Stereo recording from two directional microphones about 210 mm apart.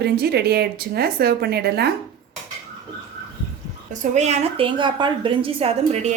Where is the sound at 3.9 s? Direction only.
35° right (ahead or behind).